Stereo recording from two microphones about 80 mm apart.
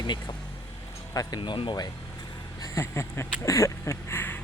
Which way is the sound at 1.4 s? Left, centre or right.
Left.